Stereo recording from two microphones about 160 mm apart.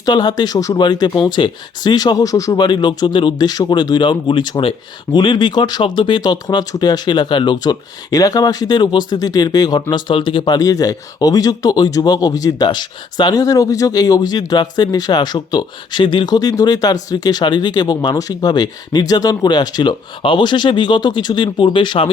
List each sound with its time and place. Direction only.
0.0 s speech: 25° left (ahead or behind)